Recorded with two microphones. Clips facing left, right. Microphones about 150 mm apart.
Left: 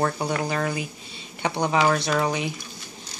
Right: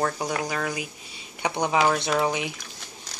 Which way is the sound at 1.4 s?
15° right (ahead or behind).